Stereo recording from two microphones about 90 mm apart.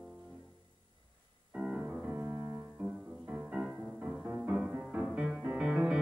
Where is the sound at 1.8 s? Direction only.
30° right (ahead or behind).